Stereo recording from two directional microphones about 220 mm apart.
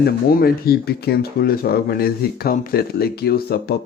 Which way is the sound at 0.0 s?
45° left (ahead or behind).